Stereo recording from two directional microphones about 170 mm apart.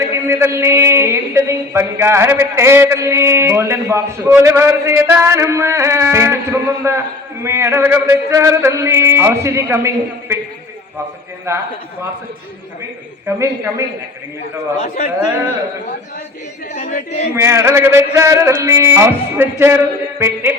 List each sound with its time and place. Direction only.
0.1 s speech: 15° right (ahead or behind)
11.5 s speech: 15° right (ahead or behind)
13.2 s speech: 15° right (ahead or behind)
14.8 s speech: 40° left (ahead or behind)
16.7 s speech: 40° left (ahead or behind)
17.3 s speech: 15° right (ahead or behind)